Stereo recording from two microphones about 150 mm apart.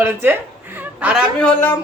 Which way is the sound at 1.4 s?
15° left (ahead or behind).